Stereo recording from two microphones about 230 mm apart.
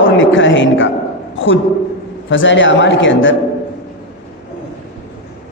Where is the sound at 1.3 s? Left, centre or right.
Left.